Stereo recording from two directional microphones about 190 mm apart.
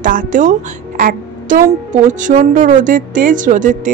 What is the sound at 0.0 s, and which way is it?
A woman's voice, 45° right (ahead or behind).